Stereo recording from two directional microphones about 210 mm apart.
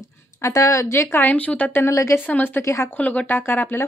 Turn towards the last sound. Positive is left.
turn(degrees=10)  # may be behind; listen again after turning